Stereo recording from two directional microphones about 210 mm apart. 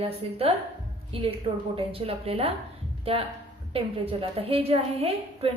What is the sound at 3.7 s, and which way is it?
A woman's voice, 25° right (ahead or behind).